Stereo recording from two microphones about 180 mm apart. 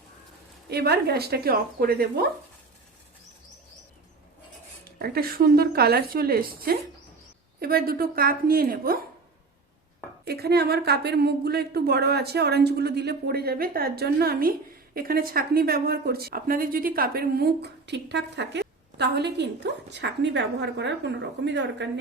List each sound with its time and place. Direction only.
0.7 s speech: 65° right (ahead or behind)
4.9 s speech: 60° right (ahead or behind)
10.2 s a woman's voice: 60° right (ahead or behind)